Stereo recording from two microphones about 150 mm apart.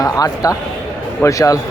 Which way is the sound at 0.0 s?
25° left (ahead or behind).